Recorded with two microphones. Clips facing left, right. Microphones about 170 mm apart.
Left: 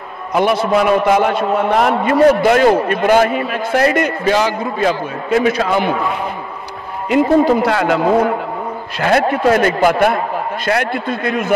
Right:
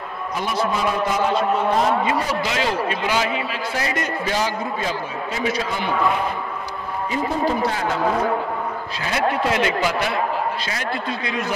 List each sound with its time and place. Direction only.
0.3 s a man's voice: 65° left (ahead or behind)
7.1 s a man's voice: 75° left (ahead or behind)
8.9 s a man's voice: 65° left (ahead or behind)